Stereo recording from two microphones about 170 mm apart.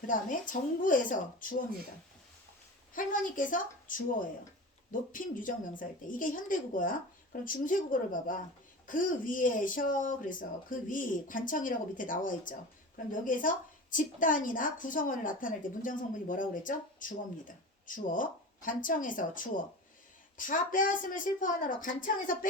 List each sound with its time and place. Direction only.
0.1 s a woman's voice: 50° left (ahead or behind)
2.9 s a woman's voice: 50° left (ahead or behind)